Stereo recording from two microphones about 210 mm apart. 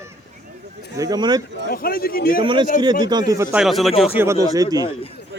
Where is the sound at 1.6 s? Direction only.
45° left (ahead or behind).